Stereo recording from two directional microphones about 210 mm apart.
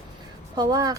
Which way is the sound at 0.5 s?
20° right (ahead or behind).